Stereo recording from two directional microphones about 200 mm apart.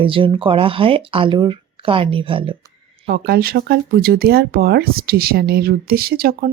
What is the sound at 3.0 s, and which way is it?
Speech, 50° right (ahead or behind).